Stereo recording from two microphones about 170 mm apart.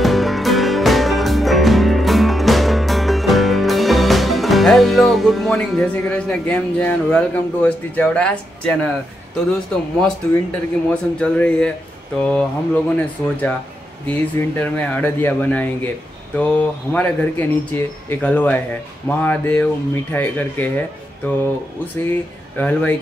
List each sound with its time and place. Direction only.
0.0 s music: centre (ahead or behind)
10.0 s speech: 5° left (ahead or behind)
14.6 s speech: 10° left (ahead or behind)
22.6 s speech: 10° left (ahead or behind)